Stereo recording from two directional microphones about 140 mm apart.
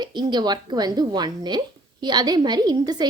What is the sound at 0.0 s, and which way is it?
A woman's voice, 30° right (ahead or behind).